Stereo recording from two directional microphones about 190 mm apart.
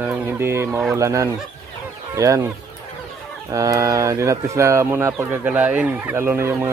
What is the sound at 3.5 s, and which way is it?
Speech, 20° right (ahead or behind).